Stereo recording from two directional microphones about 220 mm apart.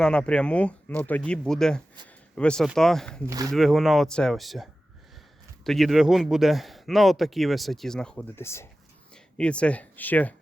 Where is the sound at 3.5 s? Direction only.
Centre (ahead or behind).